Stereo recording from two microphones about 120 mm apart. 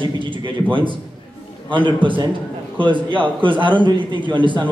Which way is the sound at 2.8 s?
40° right (ahead or behind).